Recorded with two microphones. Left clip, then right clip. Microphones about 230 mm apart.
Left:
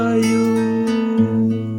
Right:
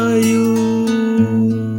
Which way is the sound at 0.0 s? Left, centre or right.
Right.